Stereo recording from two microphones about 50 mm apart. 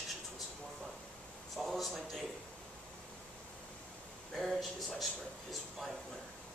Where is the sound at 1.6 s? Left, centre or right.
Centre.